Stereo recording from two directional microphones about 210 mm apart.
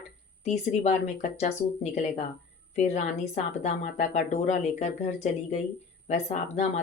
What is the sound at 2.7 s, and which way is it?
Speech, 30° left (ahead or behind).